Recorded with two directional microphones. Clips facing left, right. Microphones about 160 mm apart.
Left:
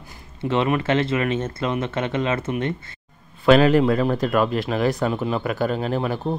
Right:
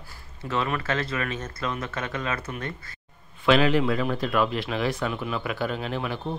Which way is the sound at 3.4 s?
45° left (ahead or behind).